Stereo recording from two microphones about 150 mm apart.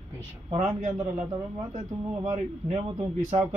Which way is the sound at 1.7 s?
50° right (ahead or behind).